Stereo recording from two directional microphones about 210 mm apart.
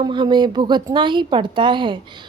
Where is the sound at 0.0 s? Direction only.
20° right (ahead or behind).